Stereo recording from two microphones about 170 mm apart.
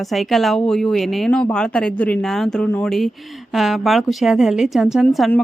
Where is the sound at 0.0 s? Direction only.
Centre (ahead or behind).